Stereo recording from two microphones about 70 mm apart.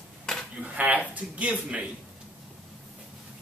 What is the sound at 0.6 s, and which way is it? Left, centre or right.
Speech, right.